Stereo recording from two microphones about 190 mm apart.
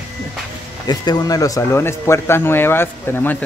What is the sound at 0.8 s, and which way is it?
Speech, 20° left (ahead or behind).